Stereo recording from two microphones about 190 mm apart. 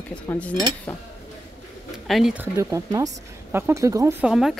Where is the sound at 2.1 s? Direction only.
Centre (ahead or behind).